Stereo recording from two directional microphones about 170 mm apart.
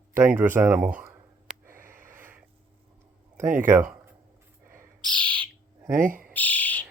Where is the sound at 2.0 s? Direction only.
15° right (ahead or behind).